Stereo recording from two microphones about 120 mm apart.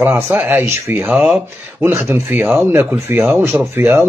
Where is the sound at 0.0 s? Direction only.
10° right (ahead or behind).